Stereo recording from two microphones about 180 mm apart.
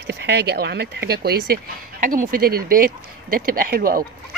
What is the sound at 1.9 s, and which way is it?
Speech, 50° right (ahead or behind).